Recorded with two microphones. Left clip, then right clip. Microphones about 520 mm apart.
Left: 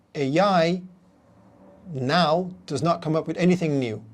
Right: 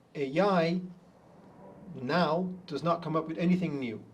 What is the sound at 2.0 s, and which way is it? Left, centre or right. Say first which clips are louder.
Speech: left 8 dB; left.